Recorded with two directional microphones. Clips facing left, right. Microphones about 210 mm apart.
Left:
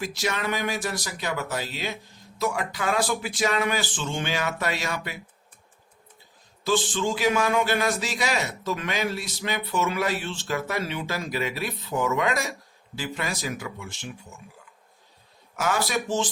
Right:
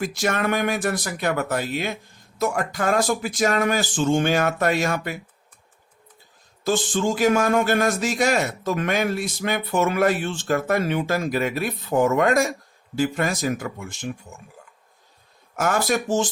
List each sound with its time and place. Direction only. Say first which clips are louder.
0.0 s a man's voice: right 5 dB; 50° right (ahead or behind)
6.7 s a man's voice: right 3 dB; 45° right (ahead or behind)
15.5 s a man's voice: right 4 dB; 50° right (ahead or behind)